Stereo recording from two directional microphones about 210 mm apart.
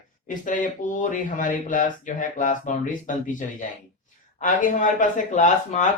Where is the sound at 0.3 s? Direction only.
40° left (ahead or behind).